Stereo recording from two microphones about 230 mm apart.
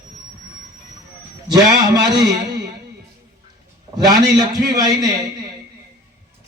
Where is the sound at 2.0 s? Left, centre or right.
Centre.